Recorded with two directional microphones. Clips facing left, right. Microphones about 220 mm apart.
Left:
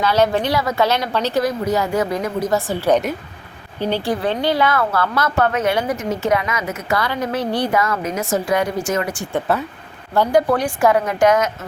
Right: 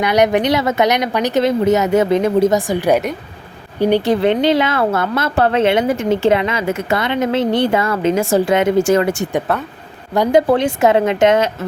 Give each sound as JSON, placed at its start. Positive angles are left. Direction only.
{"t": 0.0, "sound": "a woman's voice", "side_deg": -15}
{"t": 9.5, "sound": "speech", "side_deg": 0}
{"t": 10.2, "sound": "a woman's voice", "side_deg": -25}